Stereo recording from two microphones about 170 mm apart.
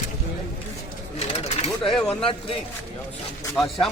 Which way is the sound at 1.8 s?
5° left (ahead or behind).